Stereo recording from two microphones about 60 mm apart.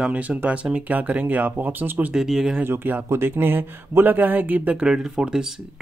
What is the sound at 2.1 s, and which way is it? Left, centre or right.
Speech, centre.